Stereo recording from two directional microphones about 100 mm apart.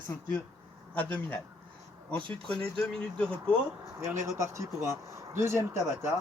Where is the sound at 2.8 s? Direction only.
10° left (ahead or behind).